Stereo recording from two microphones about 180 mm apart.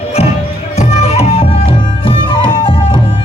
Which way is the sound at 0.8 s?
40° left (ahead or behind).